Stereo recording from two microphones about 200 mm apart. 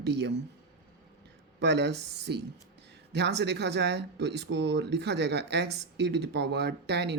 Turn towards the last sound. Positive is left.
turn(degrees=-55)  # may be behind; listen again after turning